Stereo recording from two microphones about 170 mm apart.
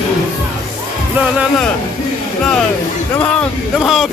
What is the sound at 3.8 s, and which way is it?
Speech, centre (ahead or behind).